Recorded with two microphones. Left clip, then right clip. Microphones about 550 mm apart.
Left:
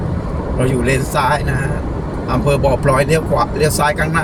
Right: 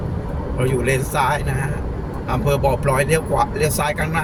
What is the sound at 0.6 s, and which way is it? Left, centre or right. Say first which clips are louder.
Speech: left 3 dB; right.